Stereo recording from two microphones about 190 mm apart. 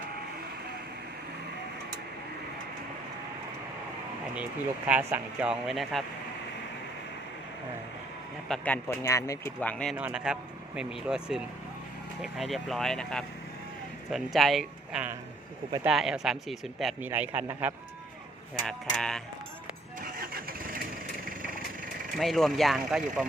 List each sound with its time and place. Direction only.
4.9 s speech: 10° right (ahead or behind)
8.4 s speech: 5° left (ahead or behind)
9.9 s speech: 5° right (ahead or behind)
18.6 s speech: 5° left (ahead or behind)
20.1 s vehicle: 50° right (ahead or behind)
22.2 s speech: centre (ahead or behind)